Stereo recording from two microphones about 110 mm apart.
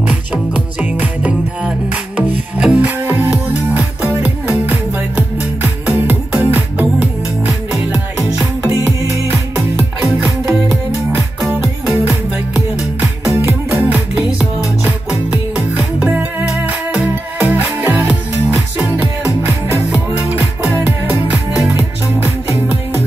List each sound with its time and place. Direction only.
0.0 s music: 10° right (ahead or behind)
10.4 s music: 25° right (ahead or behind)
11.1 s music: 10° right (ahead or behind)
13.3 s music: 25° right (ahead or behind)
13.7 s music: 15° right (ahead or behind)
20.2 s music: 15° right (ahead or behind)